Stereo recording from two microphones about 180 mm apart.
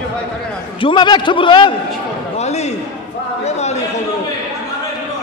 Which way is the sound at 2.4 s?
40° left (ahead or behind).